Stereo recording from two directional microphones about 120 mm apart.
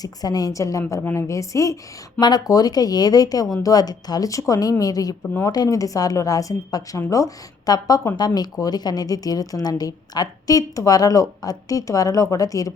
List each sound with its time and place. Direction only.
0.0 s a woman's voice: 30° left (ahead or behind)